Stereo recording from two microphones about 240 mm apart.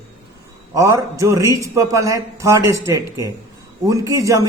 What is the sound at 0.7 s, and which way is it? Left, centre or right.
A man's voice, centre.